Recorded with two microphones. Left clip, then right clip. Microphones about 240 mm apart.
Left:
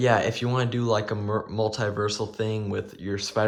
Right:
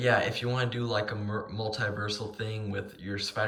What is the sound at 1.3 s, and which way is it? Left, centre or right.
Speech, centre.